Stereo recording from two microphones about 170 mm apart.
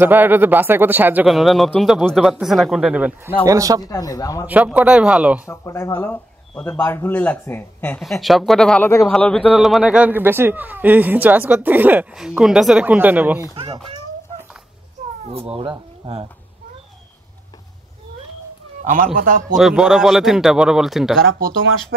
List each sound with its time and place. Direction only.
0.0 s a man's voice: 10° right (ahead or behind)
3.4 s speech: 20° right (ahead or behind)
3.8 s speech: 20° left (ahead or behind)
4.5 s a man's voice: 10° right (ahead or behind)
5.5 s a man's voice: 15° left (ahead or behind)
8.0 s a man's voice: centre (ahead or behind)
15.2 s speech: 35° right (ahead or behind)
19.1 s a man's voice: 55° right (ahead or behind)
19.5 s speech: 5° right (ahead or behind)